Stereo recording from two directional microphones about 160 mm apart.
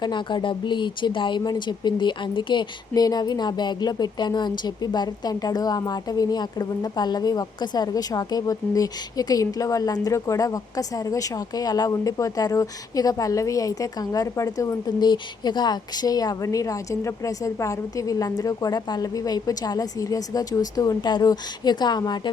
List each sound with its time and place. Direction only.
0.0 s speech: 30° left (ahead or behind)